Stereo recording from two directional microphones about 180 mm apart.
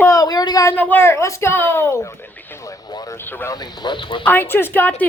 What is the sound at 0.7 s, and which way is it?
Speech, 10° left (ahead or behind).